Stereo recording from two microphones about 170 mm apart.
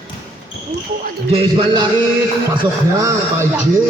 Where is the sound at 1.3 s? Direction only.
30° right (ahead or behind).